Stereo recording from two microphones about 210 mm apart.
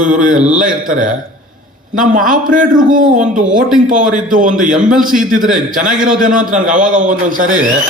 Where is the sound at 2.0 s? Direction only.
40° right (ahead or behind).